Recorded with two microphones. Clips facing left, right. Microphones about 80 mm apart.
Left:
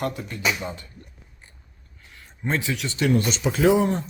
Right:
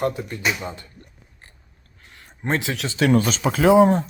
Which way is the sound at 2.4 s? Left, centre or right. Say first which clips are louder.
Right 2 dB; right.